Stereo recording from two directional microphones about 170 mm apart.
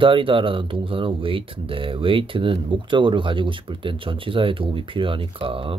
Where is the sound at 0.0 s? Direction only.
30° right (ahead or behind).